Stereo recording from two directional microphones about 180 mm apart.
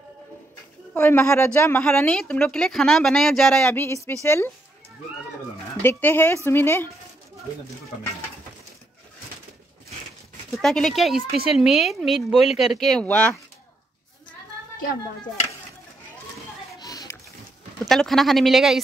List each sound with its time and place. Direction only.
0.9 s speech: 10° left (ahead or behind)
5.8 s speech: 10° left (ahead or behind)
10.6 s speech: centre (ahead or behind)
16.8 s a sound: 20° left (ahead or behind)
17.8 s speech: centre (ahead or behind)